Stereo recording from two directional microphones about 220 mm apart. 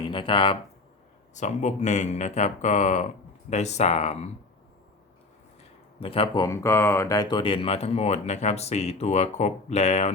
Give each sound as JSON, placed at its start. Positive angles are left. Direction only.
{"t": 0.0, "sound": "speech", "side_deg": 25}
{"t": 6.0, "sound": "speech", "side_deg": 25}